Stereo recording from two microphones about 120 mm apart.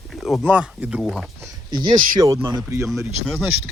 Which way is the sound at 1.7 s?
35° right (ahead or behind).